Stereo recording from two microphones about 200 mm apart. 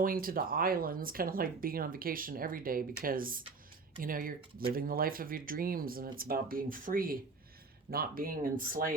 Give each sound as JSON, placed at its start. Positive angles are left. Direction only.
{"t": 0.0, "sound": "speech", "side_deg": -45}